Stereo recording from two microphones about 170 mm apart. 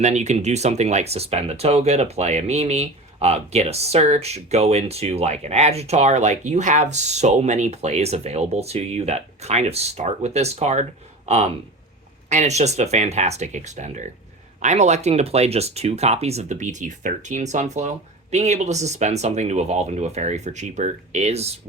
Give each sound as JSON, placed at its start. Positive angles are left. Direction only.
{"t": 0.0, "sound": "speech", "side_deg": -40}